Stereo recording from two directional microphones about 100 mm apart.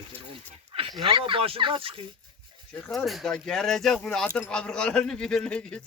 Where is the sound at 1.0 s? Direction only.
60° right (ahead or behind).